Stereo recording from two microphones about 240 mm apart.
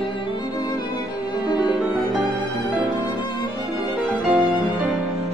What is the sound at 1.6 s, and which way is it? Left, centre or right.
Music, centre.